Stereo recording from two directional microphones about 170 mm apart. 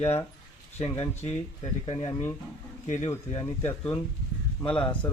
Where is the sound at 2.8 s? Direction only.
45° left (ahead or behind).